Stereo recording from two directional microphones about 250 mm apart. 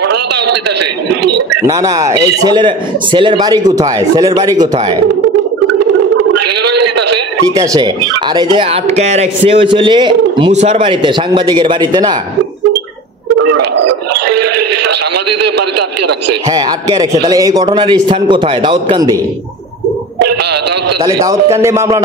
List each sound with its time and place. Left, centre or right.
1.7 s a man's voice: centre
7.5 s a man's voice: centre
13.5 s music: right
14.9 s a man's voice: right
16.4 s a man's voice: centre
21.0 s a man's voice: centre